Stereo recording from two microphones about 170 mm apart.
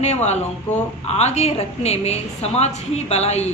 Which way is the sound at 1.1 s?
40° left (ahead or behind).